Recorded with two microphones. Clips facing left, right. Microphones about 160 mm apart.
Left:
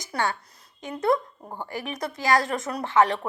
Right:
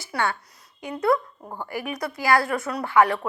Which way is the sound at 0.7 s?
25° left (ahead or behind).